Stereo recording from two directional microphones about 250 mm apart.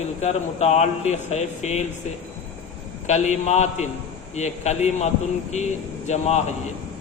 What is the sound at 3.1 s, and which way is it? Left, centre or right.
Speech, left.